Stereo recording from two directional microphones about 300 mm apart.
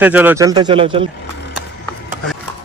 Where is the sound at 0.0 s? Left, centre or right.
Centre.